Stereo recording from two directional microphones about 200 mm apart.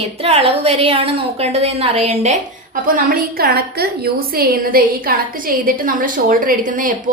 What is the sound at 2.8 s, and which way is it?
A woman's voice, 45° right (ahead or behind).